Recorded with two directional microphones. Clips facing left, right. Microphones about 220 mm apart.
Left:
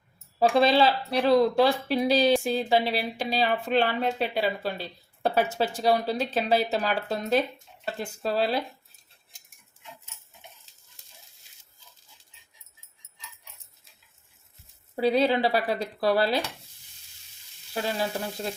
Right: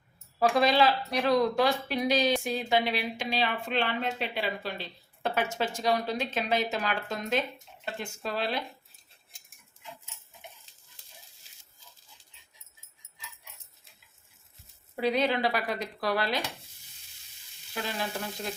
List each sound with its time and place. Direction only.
0.3 s a woman's voice: 30° left (ahead or behind)
15.0 s a woman's voice: 30° left (ahead or behind)